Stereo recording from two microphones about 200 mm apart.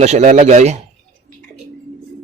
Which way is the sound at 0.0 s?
35° right (ahead or behind).